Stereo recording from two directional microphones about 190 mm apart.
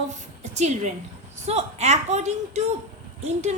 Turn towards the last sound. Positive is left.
turn(degrees=-35)  # may be behind; listen again after turning